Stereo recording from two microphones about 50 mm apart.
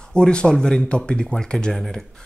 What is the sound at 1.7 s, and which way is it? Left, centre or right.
Speech, centre.